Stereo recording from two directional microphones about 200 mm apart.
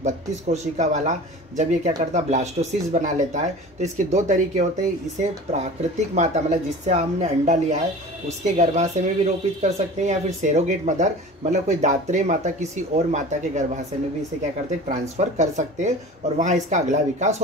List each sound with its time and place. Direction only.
0.0 s speech: 35° right (ahead or behind)
2.1 s speech: 35° right (ahead or behind)
14.9 s speech: 35° right (ahead or behind)